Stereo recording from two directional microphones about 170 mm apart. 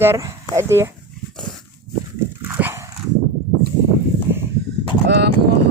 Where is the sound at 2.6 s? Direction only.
10° right (ahead or behind).